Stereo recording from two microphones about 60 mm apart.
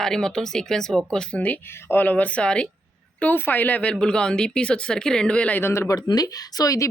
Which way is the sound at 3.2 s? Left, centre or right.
Left.